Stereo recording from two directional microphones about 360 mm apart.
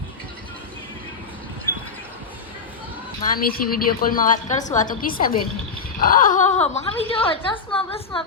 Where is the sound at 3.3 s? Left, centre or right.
Left.